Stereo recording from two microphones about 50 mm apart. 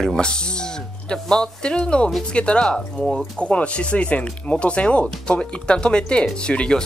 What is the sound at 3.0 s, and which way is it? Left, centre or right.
Speech, centre.